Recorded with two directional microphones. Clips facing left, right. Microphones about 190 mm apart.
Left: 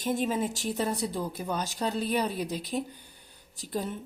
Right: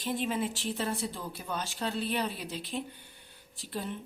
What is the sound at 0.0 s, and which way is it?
Speech, 45° left (ahead or behind).